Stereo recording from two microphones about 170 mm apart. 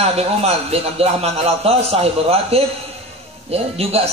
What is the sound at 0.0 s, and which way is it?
A man's voice, 35° right (ahead or behind).